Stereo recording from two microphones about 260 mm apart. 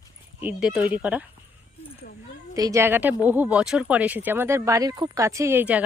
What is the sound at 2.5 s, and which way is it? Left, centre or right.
A child's voice, centre.